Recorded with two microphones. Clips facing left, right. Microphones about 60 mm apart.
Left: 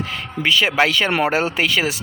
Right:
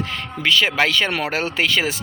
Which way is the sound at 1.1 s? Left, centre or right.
Left.